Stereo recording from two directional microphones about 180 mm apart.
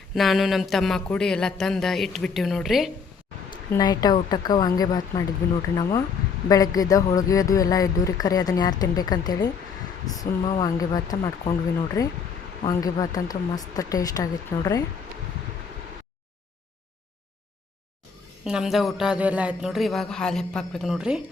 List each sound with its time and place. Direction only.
0.1 s speech: centre (ahead or behind)
3.7 s speech: 20° left (ahead or behind)
18.4 s speech: centre (ahead or behind)